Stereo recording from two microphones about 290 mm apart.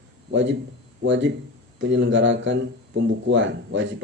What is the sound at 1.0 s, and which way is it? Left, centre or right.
A man's voice, right.